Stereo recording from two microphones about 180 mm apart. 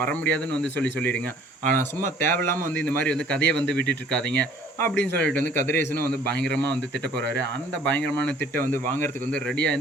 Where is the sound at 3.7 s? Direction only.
75° left (ahead or behind).